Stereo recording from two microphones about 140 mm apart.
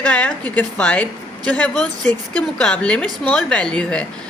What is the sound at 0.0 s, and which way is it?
A woman's voice, 10° left (ahead or behind).